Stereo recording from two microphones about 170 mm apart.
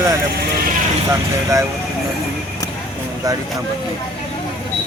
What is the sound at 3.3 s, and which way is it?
Speech, 20° right (ahead or behind).